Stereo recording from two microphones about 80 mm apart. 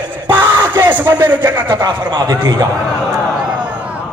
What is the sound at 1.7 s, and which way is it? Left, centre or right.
Speech, right.